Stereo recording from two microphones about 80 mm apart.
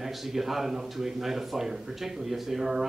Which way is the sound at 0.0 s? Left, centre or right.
Centre.